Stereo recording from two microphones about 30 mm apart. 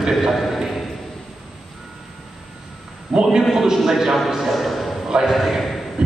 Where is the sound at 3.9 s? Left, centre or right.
Centre.